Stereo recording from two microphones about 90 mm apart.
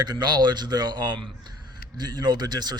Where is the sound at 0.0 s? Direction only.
50° right (ahead or behind).